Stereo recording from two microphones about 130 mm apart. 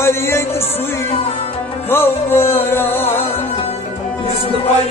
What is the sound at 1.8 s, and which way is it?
Music, 15° left (ahead or behind).